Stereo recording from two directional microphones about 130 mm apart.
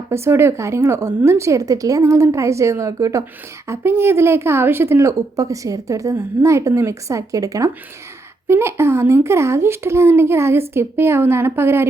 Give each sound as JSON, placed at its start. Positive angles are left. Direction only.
{"t": 0.1, "sound": "a woman's voice", "side_deg": -20}